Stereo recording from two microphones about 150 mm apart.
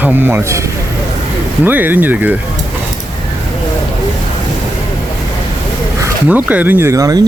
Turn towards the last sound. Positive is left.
turn(degrees=-20)  # may be behind; listen again after turning